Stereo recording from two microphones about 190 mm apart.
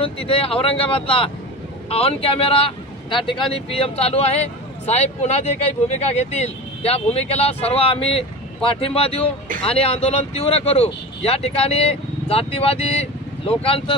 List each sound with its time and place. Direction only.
0.0 s speech: 30° left (ahead or behind)